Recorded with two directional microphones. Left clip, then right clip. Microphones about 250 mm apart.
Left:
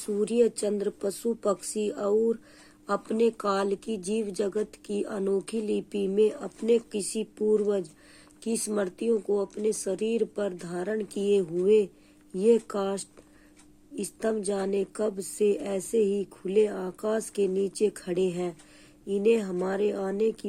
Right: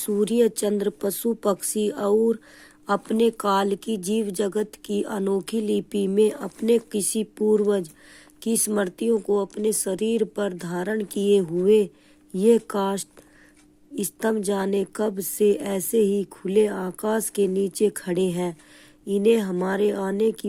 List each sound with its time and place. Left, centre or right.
0.0 s speech: right